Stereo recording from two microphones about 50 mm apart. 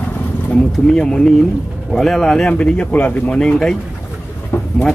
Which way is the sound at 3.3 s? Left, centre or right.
Centre.